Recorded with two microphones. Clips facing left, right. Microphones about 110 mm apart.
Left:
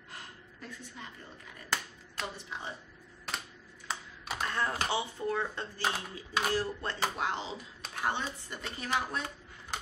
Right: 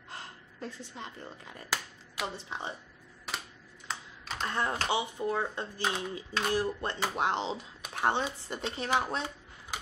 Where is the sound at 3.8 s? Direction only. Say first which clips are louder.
Left 1 dB; 10° left (ahead or behind).